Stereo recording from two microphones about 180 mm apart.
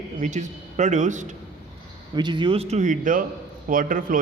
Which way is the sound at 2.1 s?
25° right (ahead or behind).